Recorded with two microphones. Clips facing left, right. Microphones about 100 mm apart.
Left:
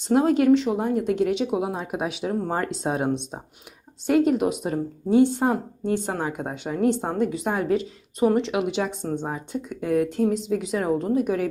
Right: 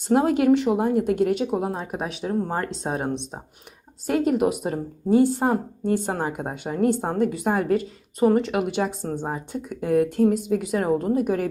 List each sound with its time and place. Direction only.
0.1 s speech: 5° right (ahead or behind)
0.3 s speech: 60° right (ahead or behind)
0.7 s speech: 5° right (ahead or behind)
0.9 s speech: 55° right (ahead or behind)
1.2 s speech: centre (ahead or behind)